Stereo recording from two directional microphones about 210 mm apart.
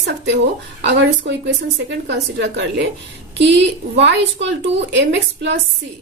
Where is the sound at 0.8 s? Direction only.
55° right (ahead or behind).